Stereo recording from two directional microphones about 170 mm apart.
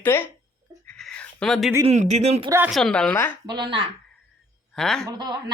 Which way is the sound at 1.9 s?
40° right (ahead or behind).